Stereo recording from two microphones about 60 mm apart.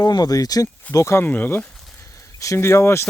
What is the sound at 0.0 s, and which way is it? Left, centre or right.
Speech, left.